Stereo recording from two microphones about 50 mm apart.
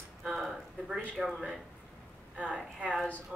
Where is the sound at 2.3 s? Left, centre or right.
Centre.